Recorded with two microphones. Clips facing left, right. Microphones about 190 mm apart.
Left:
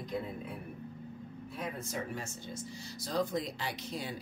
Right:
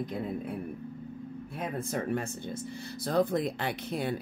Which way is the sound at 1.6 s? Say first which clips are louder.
Right 5 dB; 50° right (ahead or behind).